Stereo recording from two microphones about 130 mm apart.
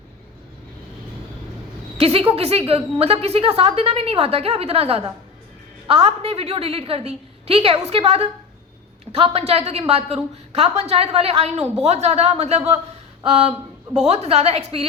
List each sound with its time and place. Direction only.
2.0 s a woman's voice: 50° right (ahead or behind)
14.1 s a woman's voice: 55° right (ahead or behind)